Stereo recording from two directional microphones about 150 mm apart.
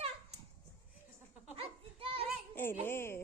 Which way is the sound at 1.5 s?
40° right (ahead or behind).